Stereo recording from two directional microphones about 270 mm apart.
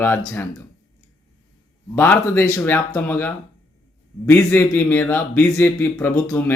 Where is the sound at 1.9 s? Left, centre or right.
Centre.